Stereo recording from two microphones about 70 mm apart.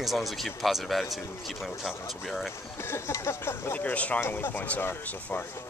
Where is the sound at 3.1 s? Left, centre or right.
Left.